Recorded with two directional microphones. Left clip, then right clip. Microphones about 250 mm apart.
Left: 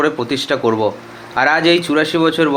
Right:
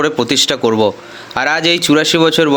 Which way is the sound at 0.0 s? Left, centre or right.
Right.